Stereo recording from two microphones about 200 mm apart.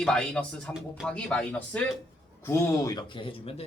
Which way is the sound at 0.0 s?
5° left (ahead or behind).